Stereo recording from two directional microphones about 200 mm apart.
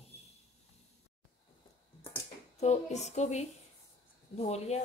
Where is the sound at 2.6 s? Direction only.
35° left (ahead or behind).